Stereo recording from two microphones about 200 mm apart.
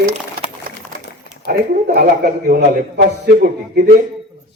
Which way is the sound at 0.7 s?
45° right (ahead or behind).